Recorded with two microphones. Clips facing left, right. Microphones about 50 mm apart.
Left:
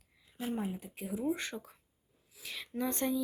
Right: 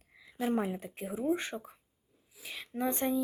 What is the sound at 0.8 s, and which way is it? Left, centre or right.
Speech, right.